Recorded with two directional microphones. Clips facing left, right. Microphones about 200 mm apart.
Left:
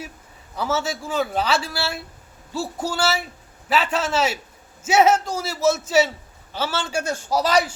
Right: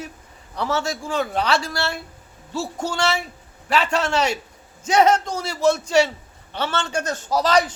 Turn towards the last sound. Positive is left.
turn(degrees=10)  # may be behind; listen again after turning